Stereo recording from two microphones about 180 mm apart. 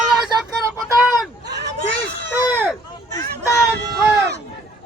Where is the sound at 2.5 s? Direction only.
10° right (ahead or behind).